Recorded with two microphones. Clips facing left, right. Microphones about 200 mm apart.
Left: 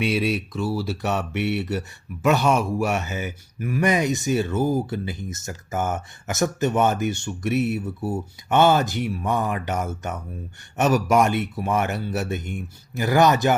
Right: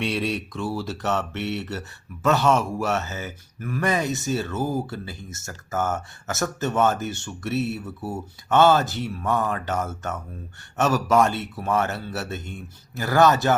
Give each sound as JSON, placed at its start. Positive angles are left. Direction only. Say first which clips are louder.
{"t": 0.0, "sound": "speech", "louder": "left 3 dB", "side_deg": 5}